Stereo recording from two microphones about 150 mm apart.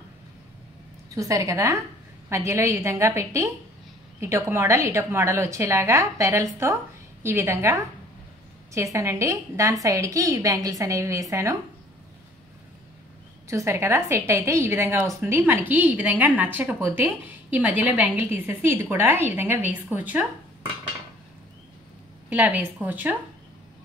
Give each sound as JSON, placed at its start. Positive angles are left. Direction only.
{"t": 1.1, "sound": "a woman's voice", "side_deg": -20}
{"t": 13.5, "sound": "a woman's voice", "side_deg": -20}
{"t": 22.3, "sound": "a woman's voice", "side_deg": -10}